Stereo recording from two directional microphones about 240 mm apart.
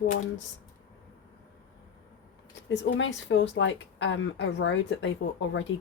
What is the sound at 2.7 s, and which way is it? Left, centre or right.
A woman's voice, left.